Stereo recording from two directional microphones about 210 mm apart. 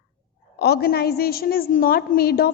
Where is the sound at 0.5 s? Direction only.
50° left (ahead or behind).